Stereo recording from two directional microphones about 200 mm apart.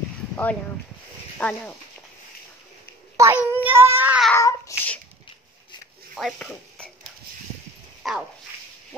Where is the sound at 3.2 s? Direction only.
15° right (ahead or behind).